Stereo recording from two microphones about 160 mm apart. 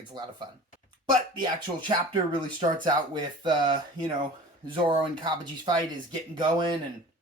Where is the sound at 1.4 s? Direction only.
30° right (ahead or behind).